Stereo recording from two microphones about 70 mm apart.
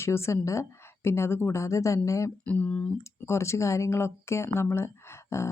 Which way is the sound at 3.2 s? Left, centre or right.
Left.